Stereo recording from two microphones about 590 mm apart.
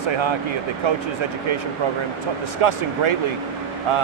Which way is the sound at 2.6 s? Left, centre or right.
Right.